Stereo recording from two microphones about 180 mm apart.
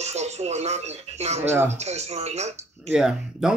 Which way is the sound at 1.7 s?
40° right (ahead or behind).